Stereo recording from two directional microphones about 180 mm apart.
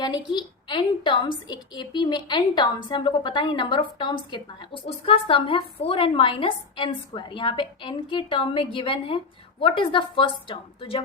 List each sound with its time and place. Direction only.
0.0 s a woman's voice: 25° left (ahead or behind)